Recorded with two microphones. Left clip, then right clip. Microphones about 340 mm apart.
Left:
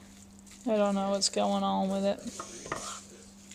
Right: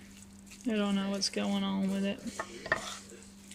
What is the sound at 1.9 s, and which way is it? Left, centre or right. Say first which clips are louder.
Speech: left 6 dB; left.